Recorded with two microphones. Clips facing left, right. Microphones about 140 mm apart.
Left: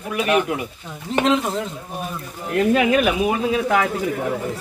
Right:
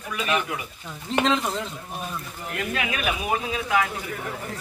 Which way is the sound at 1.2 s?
5° left (ahead or behind).